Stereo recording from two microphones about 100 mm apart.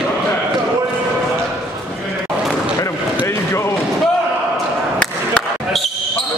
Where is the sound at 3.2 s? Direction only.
30° left (ahead or behind).